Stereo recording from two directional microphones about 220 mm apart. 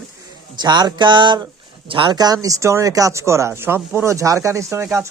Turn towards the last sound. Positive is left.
turn(degrees=-15)  # may be behind; listen again after turning